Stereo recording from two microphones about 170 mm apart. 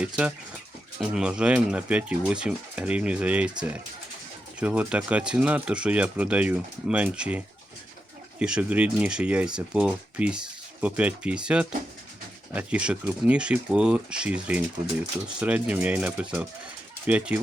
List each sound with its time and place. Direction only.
0.0 s speech: 5° right (ahead or behind)
4.6 s speech: 10° right (ahead or behind)